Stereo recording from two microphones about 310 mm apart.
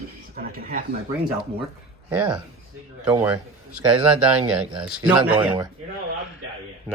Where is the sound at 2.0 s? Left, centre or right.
Centre.